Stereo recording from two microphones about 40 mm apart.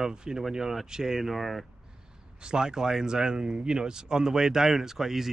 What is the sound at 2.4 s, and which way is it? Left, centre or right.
Speech, centre.